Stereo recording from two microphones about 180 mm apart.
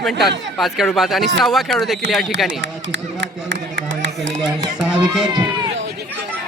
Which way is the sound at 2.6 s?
85° right.